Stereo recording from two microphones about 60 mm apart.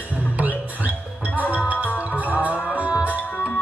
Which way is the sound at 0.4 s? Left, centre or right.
Right.